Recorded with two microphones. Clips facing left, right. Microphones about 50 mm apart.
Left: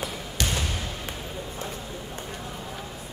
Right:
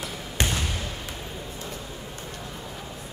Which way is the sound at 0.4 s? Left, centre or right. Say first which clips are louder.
Right 2 dB; right.